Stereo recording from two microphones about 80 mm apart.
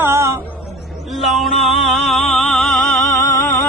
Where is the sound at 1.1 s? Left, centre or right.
Centre.